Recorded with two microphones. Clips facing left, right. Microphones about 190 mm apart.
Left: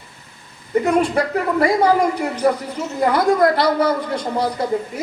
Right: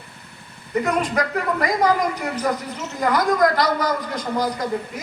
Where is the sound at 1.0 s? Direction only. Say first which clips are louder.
Left 3 dB; 30° left (ahead or behind).